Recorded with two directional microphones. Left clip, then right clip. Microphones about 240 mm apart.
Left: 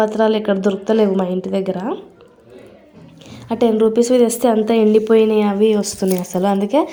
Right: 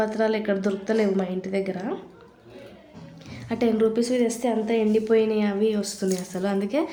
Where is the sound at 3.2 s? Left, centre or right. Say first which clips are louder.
Left 8 dB; centre.